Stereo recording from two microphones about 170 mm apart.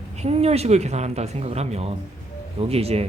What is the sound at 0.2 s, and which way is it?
A man's voice, 40° right (ahead or behind).